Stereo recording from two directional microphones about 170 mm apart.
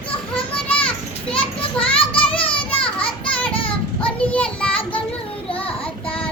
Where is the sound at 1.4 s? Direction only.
35° left (ahead or behind).